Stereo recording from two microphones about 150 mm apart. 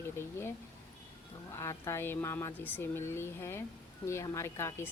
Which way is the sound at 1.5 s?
20° left (ahead or behind).